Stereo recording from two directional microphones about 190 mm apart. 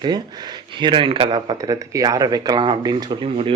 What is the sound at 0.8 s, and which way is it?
A man's voice, 25° right (ahead or behind).